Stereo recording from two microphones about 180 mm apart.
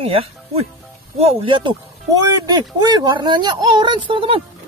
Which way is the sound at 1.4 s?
25° right (ahead or behind).